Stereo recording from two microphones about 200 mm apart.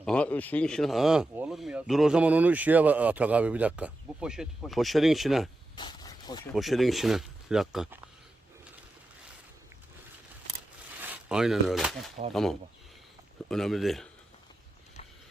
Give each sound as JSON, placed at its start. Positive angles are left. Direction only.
{"t": 0.0, "sound": "speech", "side_deg": 5}
{"t": 5.7, "sound": "a sound", "side_deg": 20}
{"t": 6.4, "sound": "speech", "side_deg": 0}
{"t": 11.0, "sound": "speech", "side_deg": -5}